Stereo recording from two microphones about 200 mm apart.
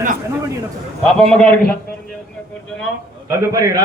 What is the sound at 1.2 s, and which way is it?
Speech, 5° left (ahead or behind).